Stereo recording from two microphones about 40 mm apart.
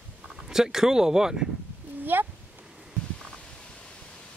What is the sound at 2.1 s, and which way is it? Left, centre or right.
Speech, right.